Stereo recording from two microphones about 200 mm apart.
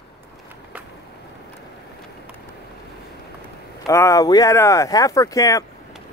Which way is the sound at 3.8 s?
15° left (ahead or behind).